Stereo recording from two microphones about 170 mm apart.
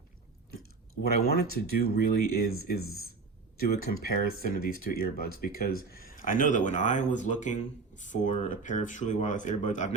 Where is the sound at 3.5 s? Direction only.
60° left (ahead or behind).